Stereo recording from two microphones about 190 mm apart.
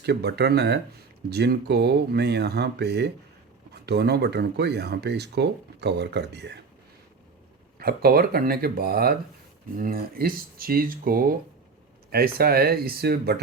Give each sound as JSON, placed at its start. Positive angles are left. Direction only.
{"t": 0.0, "sound": "speech", "side_deg": -60}
{"t": 7.8, "sound": "speech", "side_deg": -55}